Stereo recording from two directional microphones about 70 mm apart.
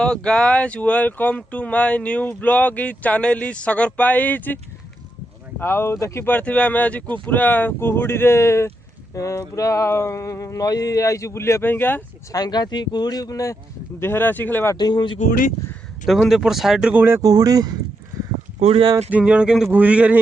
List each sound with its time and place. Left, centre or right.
0.0 s speech: centre; by 6.0 s left
6.2 s speech: left
9.1 s speech: left
11.6 s speech: left
12.3 s speech: left
14.0 s speech: left
14.8 s speech: left
16.3 s speech: centre
16.9 s speech: right
17.2 s speech: right
18.1 s a sound: right
19.1 s speech: centre